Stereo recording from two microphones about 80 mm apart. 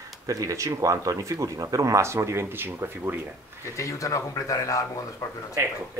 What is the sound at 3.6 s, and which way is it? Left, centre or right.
Speech, left.